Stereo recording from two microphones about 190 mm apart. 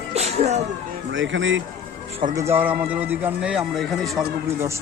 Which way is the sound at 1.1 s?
75° right (ahead or behind).